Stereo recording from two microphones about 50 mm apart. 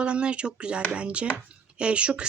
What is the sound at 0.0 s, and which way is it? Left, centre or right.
Speech, right.